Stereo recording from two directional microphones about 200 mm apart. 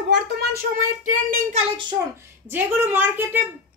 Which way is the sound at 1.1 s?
40° right (ahead or behind).